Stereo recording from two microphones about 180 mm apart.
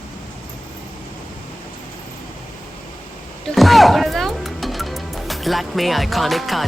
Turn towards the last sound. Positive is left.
turn(degrees=0)  # may be behind; listen again after turning